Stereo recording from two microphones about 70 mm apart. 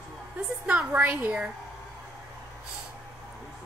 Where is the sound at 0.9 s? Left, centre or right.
Right.